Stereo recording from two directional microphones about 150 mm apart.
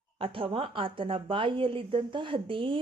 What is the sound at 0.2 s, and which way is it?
A woman's voice, 35° right (ahead or behind).